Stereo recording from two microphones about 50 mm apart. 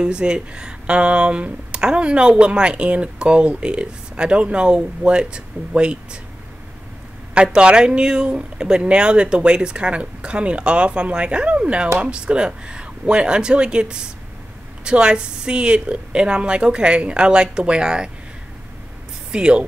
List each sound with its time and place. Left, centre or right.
0.0 s speech: centre
7.5 s speech: centre
19.3 s speech: centre